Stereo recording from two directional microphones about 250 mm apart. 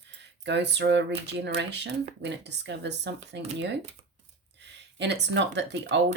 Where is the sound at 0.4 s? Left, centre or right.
Right.